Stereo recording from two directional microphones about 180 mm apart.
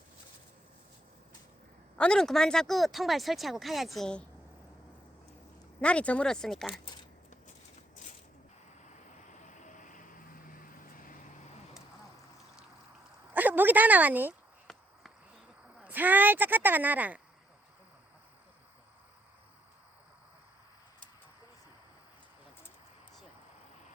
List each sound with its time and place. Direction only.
2.0 s speech: 5° left (ahead or behind)
5.8 s speech: 5° left (ahead or behind)
9.4 s vehicle: 45° left (ahead or behind)
13.3 s a sound: 10° right (ahead or behind)
14.7 s walk: centre (ahead or behind)
15.8 s speech: 10° right (ahead or behind)